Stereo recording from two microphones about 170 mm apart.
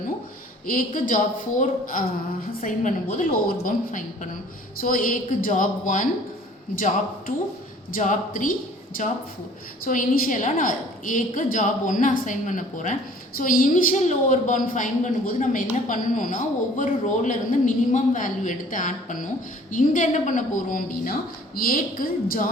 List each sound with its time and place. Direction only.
0.7 s a woman's voice: 55° left (ahead or behind)
9.8 s a woman's voice: 55° left (ahead or behind)